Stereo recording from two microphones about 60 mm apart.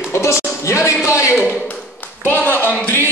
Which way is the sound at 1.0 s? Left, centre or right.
Left.